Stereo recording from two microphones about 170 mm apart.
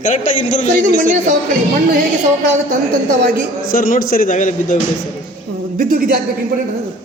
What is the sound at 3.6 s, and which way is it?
A man's voice, 55° left (ahead or behind).